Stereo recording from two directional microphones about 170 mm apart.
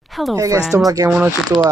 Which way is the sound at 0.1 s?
Centre (ahead or behind).